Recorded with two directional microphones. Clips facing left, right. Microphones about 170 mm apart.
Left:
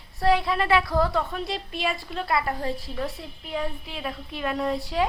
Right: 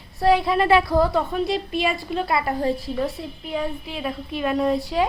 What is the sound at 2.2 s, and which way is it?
A woman's voice, 20° right (ahead or behind).